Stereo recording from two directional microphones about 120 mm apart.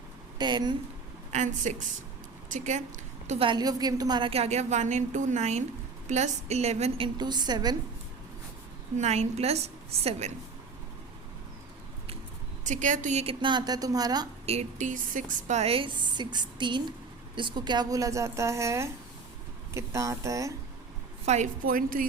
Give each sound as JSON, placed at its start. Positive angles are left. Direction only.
{"t": 0.3, "sound": "speech", "side_deg": -35}
{"t": 1.3, "sound": "a woman's voice", "side_deg": -80}
{"t": 3.3, "sound": "a woman's voice", "side_deg": -45}
{"t": 3.6, "sound": "a woman's voice", "side_deg": -35}
{"t": 4.3, "sound": "a woman's voice", "side_deg": -65}
{"t": 9.0, "sound": "a woman's voice", "side_deg": -65}
{"t": 12.6, "sound": "a woman's voice", "side_deg": -90}
{"t": 13.2, "sound": "a woman's voice", "side_deg": -40}
{"t": 14.4, "sound": "a woman's voice", "side_deg": -65}
{"t": 21.2, "sound": "speech", "side_deg": -80}